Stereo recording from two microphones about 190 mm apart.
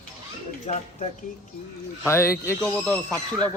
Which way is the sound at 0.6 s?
35° left (ahead or behind).